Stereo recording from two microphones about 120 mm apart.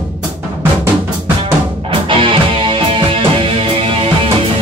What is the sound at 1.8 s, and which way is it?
Music, 45° right (ahead or behind).